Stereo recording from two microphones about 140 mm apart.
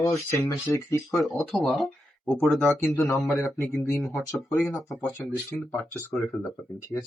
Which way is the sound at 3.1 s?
25° left (ahead or behind).